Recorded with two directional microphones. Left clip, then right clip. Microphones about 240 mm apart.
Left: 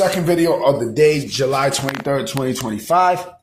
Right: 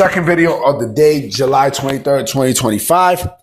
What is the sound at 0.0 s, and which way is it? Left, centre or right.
Speech, centre.